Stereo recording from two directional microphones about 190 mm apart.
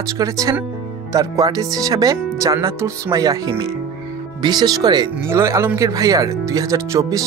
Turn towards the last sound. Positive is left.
turn(degrees=-15)  # may be behind; listen again after turning